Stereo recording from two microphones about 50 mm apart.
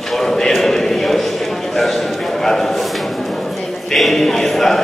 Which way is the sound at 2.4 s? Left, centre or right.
Centre.